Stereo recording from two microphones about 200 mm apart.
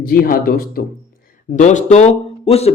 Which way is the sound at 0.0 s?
45° left (ahead or behind).